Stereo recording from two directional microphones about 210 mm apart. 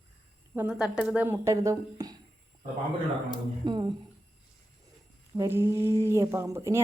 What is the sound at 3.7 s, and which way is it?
Speech, 20° right (ahead or behind).